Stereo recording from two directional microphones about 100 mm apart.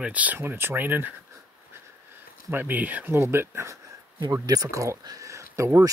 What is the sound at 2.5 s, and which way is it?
Speech, 20° right (ahead or behind).